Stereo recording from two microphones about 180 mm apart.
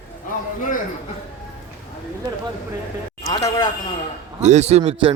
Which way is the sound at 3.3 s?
20° left (ahead or behind).